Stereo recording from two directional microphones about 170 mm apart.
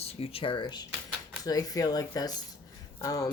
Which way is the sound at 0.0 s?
35° left (ahead or behind).